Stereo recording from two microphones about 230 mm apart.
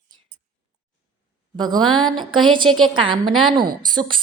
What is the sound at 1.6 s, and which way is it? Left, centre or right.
A woman's voice, centre.